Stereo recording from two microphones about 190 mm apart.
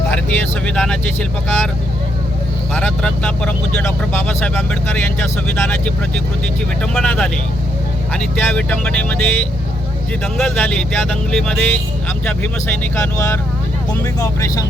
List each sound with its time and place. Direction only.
0.1 s speech: 5° left (ahead or behind)
2.7 s speech: 5° left (ahead or behind)